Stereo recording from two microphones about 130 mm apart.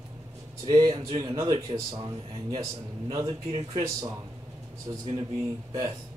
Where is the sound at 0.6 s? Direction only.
30° right (ahead or behind).